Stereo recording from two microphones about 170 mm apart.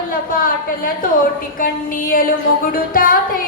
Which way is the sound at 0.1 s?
55° left (ahead or behind).